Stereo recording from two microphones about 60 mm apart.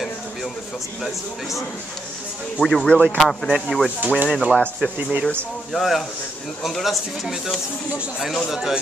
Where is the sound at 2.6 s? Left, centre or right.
Centre.